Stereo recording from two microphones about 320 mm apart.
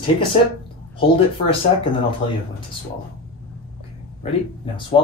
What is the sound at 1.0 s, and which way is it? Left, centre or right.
Speech, centre.